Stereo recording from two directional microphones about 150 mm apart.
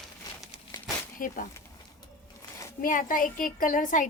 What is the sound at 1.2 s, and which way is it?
Speech, 65° left (ahead or behind).